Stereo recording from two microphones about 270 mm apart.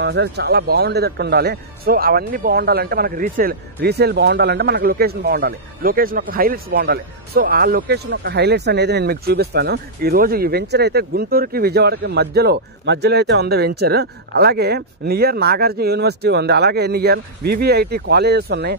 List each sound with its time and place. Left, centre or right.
0.0 s a man's voice: right